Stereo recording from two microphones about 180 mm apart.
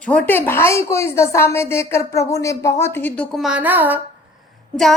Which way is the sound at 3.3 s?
5° right (ahead or behind).